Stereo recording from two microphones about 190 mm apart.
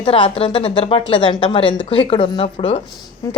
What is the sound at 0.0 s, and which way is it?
A woman's voice, 25° left (ahead or behind).